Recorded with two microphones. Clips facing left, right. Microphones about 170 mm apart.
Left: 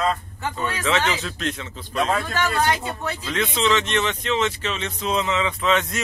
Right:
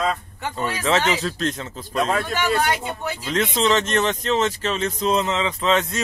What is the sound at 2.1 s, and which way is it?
Speech, centre (ahead or behind).